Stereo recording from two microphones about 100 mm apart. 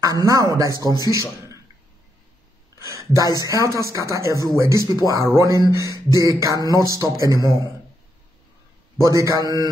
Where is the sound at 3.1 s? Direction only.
40° left (ahead or behind).